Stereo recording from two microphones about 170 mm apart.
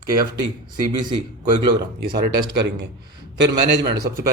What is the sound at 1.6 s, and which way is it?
Speech, 25° right (ahead or behind).